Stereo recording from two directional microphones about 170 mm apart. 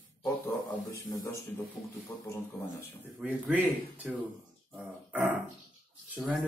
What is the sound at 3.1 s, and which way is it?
Speech, 5° right (ahead or behind).